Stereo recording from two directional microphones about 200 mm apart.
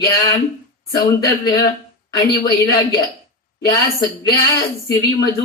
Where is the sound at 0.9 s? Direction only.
20° left (ahead or behind).